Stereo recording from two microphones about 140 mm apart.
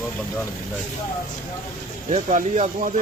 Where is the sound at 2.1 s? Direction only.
60° right (ahead or behind).